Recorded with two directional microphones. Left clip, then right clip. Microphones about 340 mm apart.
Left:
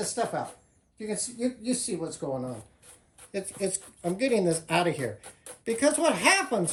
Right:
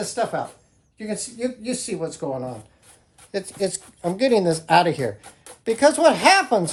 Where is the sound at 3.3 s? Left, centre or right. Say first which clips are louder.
Right 6 dB; centre.